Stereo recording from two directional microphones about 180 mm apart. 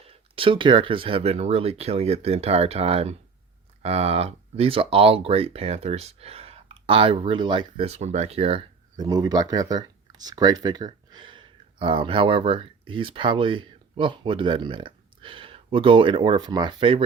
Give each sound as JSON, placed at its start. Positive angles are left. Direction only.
{"t": 0.3, "sound": "speech", "side_deg": -30}